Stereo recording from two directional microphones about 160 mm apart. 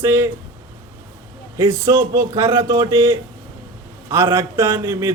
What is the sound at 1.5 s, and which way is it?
A man's voice, 20° right (ahead or behind).